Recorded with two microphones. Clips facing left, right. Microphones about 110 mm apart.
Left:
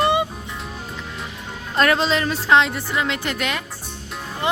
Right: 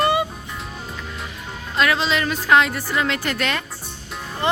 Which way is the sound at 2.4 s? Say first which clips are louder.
Right 1 dB; 25° left (ahead or behind).